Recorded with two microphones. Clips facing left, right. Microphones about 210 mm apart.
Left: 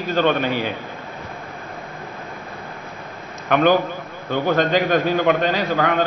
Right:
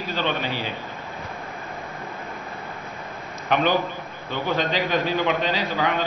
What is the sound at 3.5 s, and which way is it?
A man's voice, 50° left (ahead or behind).